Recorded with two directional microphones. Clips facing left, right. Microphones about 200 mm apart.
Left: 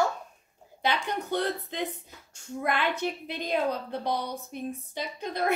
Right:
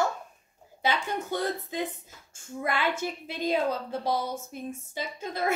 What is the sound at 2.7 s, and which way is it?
Speech, 15° left (ahead or behind).